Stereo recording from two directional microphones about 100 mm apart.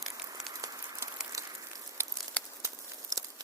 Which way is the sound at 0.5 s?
35° right (ahead or behind).